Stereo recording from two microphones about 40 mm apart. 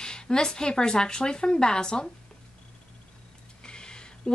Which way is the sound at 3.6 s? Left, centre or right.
Left.